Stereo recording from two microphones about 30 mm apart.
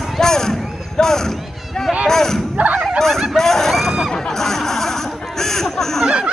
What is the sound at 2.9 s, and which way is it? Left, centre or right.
Fowl, centre.